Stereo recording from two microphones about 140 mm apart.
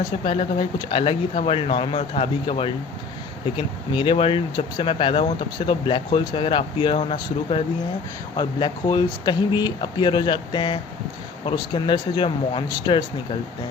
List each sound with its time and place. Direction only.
0.9 s speech: 40° left (ahead or behind)